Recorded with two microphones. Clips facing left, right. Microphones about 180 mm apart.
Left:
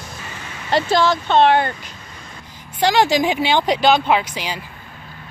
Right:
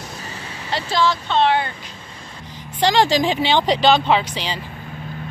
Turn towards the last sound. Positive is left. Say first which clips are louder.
# even
turn(degrees=10)  # may be behind; listen again after turning